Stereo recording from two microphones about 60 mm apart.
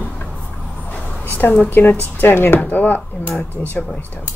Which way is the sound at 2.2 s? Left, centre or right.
Left.